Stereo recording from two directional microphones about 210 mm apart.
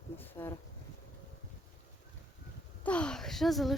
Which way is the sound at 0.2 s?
10° left (ahead or behind).